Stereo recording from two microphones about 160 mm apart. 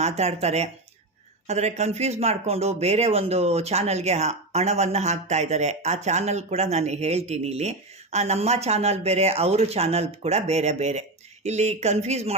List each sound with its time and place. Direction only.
0.0 s speech: 40° right (ahead or behind)